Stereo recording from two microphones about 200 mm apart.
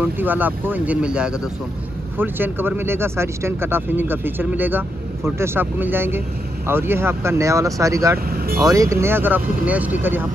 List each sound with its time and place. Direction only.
0.0 s speech: 10° right (ahead or behind)
8.3 s speech: 50° right (ahead or behind)
8.5 s speech: 15° right (ahead or behind)